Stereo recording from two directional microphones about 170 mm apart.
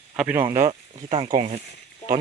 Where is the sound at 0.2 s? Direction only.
10° right (ahead or behind).